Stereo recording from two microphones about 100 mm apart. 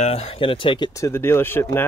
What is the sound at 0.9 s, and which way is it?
Speech, 25° left (ahead or behind).